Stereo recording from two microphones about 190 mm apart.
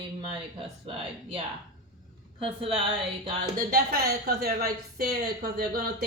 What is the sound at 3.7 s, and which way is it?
Speech, 55° right (ahead or behind).